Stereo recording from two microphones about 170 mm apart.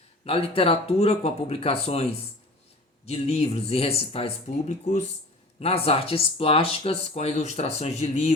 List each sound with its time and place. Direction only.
0.3 s speech: 35° left (ahead or behind)